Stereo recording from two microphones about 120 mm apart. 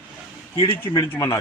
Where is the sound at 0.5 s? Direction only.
45° left (ahead or behind).